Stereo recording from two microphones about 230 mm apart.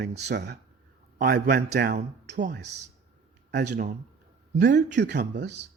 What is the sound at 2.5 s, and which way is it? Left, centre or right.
Speech, right.